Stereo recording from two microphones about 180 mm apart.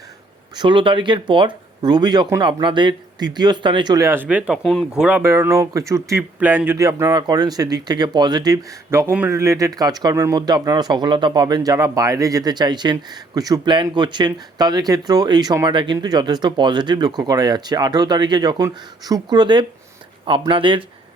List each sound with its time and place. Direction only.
0.5 s speech: 25° right (ahead or behind); by 5.0 s centre (ahead or behind)
5.0 s speech: 10° right (ahead or behind); by 20.8 s 30° right (ahead or behind)